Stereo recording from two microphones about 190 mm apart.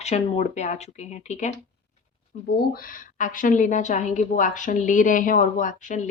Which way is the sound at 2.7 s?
45° left (ahead or behind).